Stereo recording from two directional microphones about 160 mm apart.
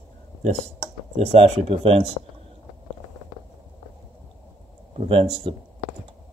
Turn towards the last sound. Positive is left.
turn(degrees=-35)  # may be behind; listen again after turning